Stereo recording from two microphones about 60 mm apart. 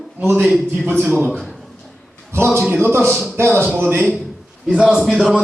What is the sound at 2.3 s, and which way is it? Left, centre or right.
A man's voice, right.